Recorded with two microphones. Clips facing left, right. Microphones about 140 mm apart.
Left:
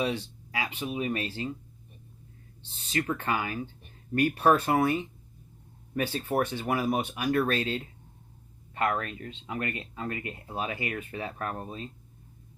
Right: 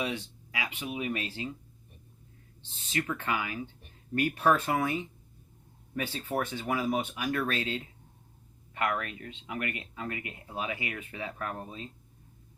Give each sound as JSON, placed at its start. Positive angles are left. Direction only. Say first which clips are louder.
{"t": 0.0, "sound": "speech", "louder": "left 4 dB", "side_deg": 35}
{"t": 2.7, "sound": "speech", "louder": "left 3 dB", "side_deg": 35}
{"t": 7.0, "sound": "speech", "louder": "left 5 dB", "side_deg": 35}